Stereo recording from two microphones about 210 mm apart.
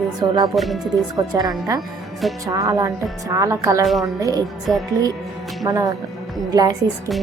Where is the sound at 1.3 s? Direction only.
15° right (ahead or behind).